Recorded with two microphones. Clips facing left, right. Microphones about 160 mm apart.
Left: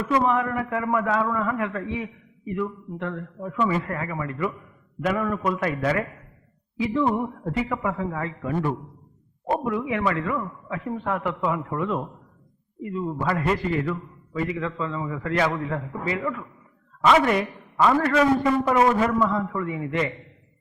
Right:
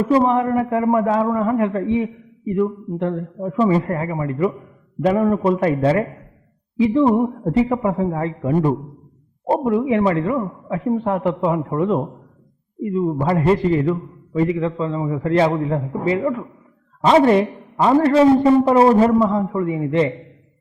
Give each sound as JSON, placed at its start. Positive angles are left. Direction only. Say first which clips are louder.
{"t": 0.0, "sound": "a man's voice", "louder": "right 6 dB", "side_deg": -30}